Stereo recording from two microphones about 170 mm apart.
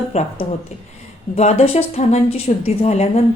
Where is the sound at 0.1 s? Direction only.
40° left (ahead or behind).